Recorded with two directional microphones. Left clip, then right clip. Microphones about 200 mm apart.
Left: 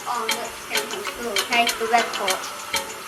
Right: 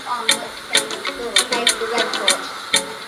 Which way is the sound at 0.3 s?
45° right (ahead or behind).